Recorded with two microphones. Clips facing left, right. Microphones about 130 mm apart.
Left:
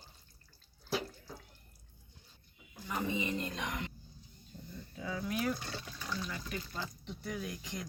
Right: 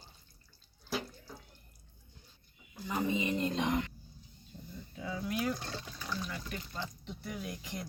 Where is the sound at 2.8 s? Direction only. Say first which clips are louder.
Right 3 dB; 20° right (ahead or behind).